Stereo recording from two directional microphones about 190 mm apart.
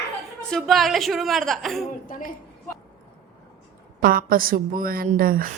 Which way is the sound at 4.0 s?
50° right (ahead or behind).